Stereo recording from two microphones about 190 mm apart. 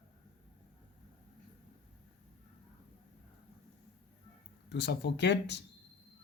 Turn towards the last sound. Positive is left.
turn(degrees=65)  # may be behind; listen again after turning